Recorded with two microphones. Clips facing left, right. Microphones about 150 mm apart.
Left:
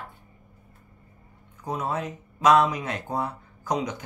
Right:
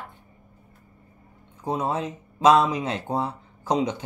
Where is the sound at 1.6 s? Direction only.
25° right (ahead or behind).